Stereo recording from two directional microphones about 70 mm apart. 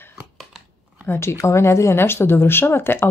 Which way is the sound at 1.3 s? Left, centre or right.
Left.